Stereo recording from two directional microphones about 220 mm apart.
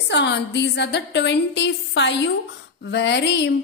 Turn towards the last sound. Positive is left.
turn(degrees=50)  # may be behind; listen again after turning